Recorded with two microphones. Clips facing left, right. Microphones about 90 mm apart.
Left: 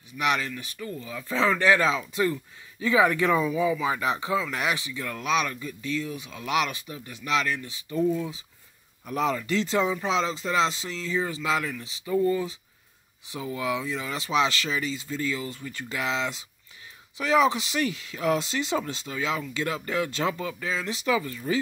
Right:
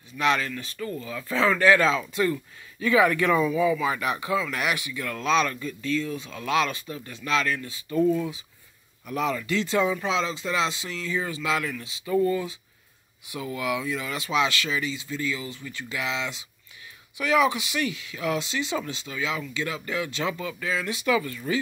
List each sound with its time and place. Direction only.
0.1 s speech: 15° left (ahead or behind)
9.0 s speech: 30° left (ahead or behind)